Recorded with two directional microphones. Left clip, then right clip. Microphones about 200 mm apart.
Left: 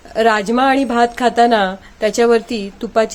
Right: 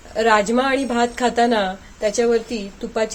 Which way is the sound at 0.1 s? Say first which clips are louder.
Left 2 dB; 25° left (ahead or behind).